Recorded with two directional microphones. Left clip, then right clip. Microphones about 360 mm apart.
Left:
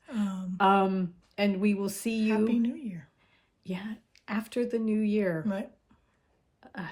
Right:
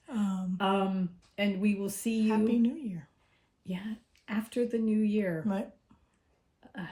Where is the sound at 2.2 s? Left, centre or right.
Centre.